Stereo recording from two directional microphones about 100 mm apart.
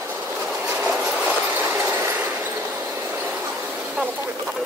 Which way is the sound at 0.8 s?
10° right (ahead or behind).